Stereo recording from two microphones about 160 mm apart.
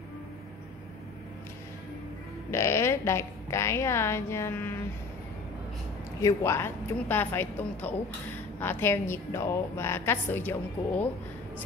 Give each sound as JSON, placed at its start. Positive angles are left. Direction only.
{"t": 2.5, "sound": "a woman's voice", "side_deg": 15}
{"t": 6.2, "sound": "a woman's voice", "side_deg": 15}